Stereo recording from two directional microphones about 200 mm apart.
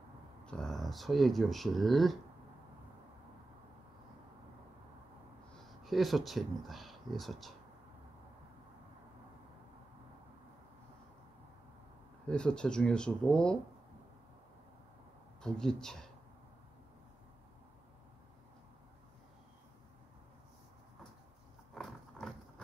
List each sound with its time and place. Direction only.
0.5 s speech: 5° left (ahead or behind)
5.7 s speech: centre (ahead or behind)
12.3 s speech: 5° left (ahead or behind)
15.4 s speech: 5° left (ahead or behind)
21.7 s a sound: centre (ahead or behind)